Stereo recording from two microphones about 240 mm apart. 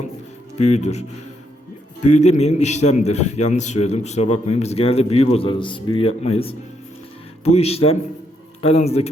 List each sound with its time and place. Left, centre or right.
0.5 s a man's voice: left